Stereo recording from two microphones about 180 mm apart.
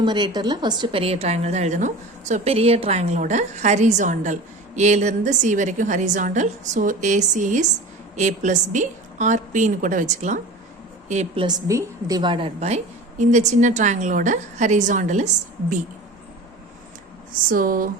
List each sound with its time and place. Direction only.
0.0 s a woman's voice: 25° right (ahead or behind)
11.4 s a woman's voice: 20° right (ahead or behind); by 15.3 s 40° right (ahead or behind)
17.5 s a woman's voice: 50° right (ahead or behind)